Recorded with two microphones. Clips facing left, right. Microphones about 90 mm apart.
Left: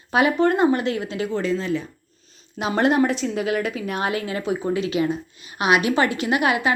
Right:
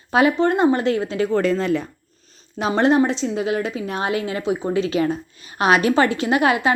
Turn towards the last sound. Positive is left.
turn(degrees=-30)  # may be behind; listen again after turning